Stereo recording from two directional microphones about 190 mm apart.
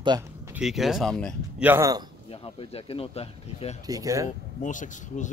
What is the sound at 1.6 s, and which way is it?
Speech, 10° right (ahead or behind).